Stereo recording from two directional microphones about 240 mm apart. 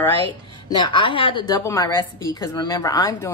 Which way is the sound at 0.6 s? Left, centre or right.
Centre.